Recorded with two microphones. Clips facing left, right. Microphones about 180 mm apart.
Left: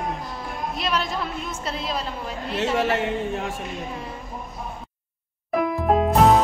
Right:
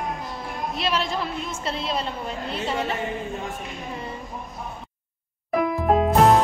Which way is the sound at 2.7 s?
80° left.